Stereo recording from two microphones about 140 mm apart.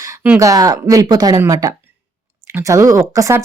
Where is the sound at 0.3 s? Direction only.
25° right (ahead or behind).